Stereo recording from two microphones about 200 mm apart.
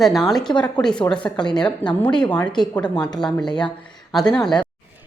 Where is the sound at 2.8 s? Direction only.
20° left (ahead or behind).